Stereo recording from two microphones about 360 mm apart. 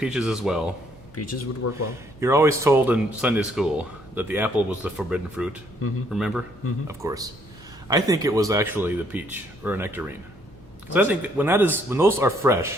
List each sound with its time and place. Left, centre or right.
0.0 s speech: centre
1.1 s speech: left
2.2 s speech: centre